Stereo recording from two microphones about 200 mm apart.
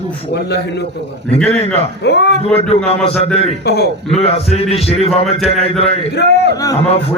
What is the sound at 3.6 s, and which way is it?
Speech, 55° left (ahead or behind).